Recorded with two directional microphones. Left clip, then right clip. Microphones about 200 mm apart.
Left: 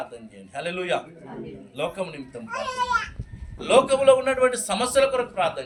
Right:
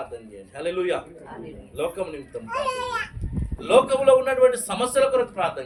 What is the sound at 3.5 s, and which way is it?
A man's voice, 15° right (ahead or behind).